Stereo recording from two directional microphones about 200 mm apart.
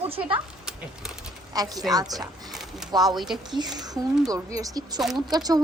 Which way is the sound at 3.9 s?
20° right (ahead or behind).